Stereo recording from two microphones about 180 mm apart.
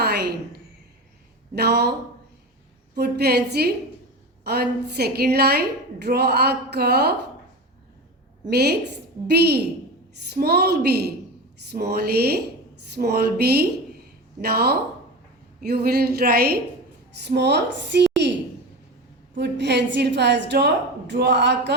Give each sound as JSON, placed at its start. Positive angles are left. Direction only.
{"t": 0.0, "sound": "a sound", "side_deg": -65}
{"t": 1.5, "sound": "a woman's voice", "side_deg": -65}
{"t": 2.9, "sound": "a woman's voice", "side_deg": -60}
{"t": 8.4, "sound": "a woman's voice", "side_deg": -65}
{"t": 17.1, "sound": "a woman's voice", "side_deg": -70}
{"t": 18.2, "sound": "a sound", "side_deg": -70}
{"t": 19.4, "sound": "a woman's voice", "side_deg": -70}